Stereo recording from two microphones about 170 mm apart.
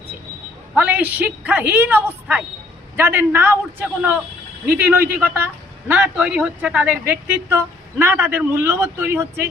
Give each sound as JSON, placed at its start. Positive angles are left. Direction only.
{"t": 0.8, "sound": "speech", "side_deg": -10}